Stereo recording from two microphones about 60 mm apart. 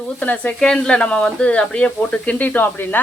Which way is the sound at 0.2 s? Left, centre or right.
Left.